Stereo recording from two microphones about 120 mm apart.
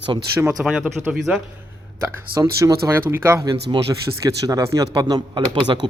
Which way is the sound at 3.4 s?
40° right (ahead or behind).